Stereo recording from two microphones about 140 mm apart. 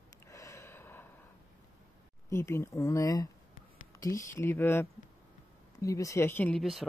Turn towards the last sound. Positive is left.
turn(degrees=0)  # may be behind; listen again after turning